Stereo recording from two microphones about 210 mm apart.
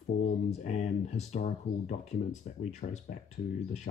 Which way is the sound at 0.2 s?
30° left (ahead or behind).